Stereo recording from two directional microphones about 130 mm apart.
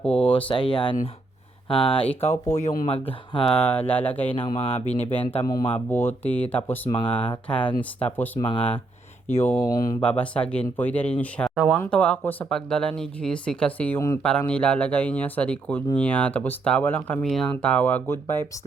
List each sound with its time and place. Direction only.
0.3 s speech: 40° left (ahead or behind)
1.7 s speech: 40° left (ahead or behind)
2.6 s speech: 60° left (ahead or behind); by 3.5 s 45° left (ahead or behind)
3.5 s speech: 10° left (ahead or behind)
4.4 s speech: 45° left (ahead or behind)
5.4 s speech: 35° left (ahead or behind)
5.9 s speech: 15° left (ahead or behind)
6.9 s speech: 40° left (ahead or behind)
7.4 s speech: 10° left (ahead or behind)
8.4 s speech: 40° left (ahead or behind)
9.3 s speech: 20° left (ahead or behind)
10.0 s speech: 10° left (ahead or behind)
17.2 s speech: 5° left (ahead or behind)